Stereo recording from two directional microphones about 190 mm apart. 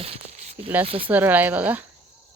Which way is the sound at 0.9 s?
30° right (ahead or behind).